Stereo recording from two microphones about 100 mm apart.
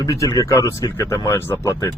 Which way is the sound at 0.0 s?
35° left (ahead or behind).